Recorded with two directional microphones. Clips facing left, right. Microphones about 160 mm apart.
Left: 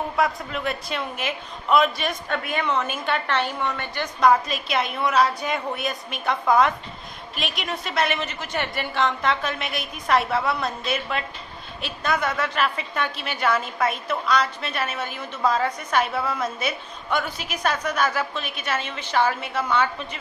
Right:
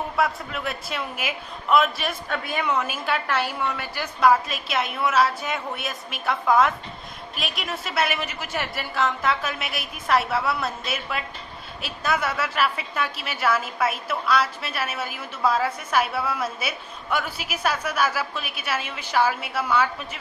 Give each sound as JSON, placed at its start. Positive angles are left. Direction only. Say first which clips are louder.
{"t": 0.1, "sound": "a woman's voice", "louder": "left 1 dB", "side_deg": 0}